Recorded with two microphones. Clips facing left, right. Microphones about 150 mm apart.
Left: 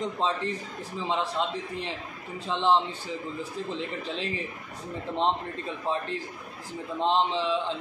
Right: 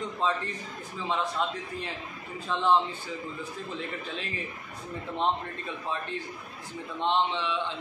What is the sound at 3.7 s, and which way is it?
Speech, 25° left (ahead or behind).